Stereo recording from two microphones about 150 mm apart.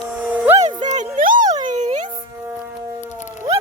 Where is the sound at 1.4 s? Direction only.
25° right (ahead or behind).